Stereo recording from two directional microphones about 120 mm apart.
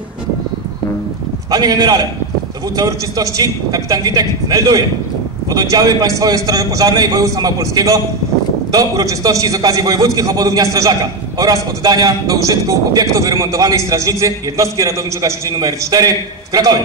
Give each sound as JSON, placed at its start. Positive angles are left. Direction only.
{"t": 1.5, "sound": "a man's voice", "side_deg": -30}